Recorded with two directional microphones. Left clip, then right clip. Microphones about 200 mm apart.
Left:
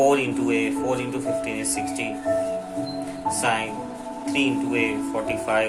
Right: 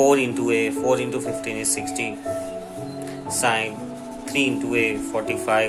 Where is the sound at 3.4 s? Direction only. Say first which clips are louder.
Right 5 dB; 25° right (ahead or behind).